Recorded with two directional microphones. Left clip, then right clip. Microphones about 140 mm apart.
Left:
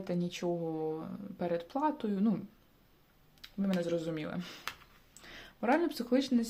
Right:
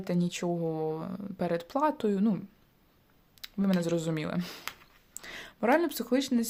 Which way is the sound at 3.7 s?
60° right (ahead or behind).